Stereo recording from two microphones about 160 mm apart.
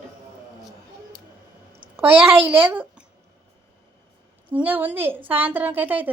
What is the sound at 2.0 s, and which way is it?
Speech, 10° right (ahead or behind).